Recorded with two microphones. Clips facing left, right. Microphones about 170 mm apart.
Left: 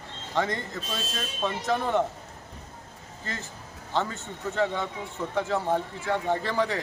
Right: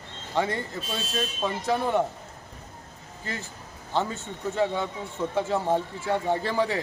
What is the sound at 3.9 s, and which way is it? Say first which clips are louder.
Speech: right 1 dB; 15° right (ahead or behind).